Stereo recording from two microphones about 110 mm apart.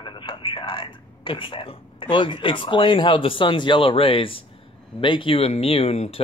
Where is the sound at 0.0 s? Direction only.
45° left (ahead or behind).